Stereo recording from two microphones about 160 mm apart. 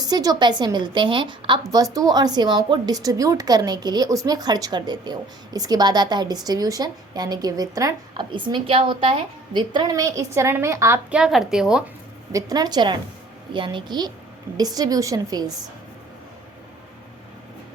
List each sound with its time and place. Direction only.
0.0 s a woman's voice: 25° right (ahead or behind)
11.1 s a woman's voice: 5° right (ahead or behind)
12.3 s a woman's voice: 20° right (ahead or behind)